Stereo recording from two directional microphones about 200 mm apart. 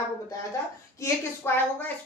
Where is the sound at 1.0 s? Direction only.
10° left (ahead or behind).